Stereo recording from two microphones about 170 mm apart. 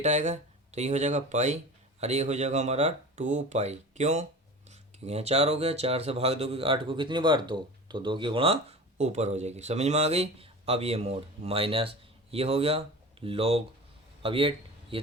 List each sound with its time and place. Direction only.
0.0 s speech: 45° right (ahead or behind)
9.0 s speech: 40° right (ahead or behind)
14.2 s a sound: 30° right (ahead or behind)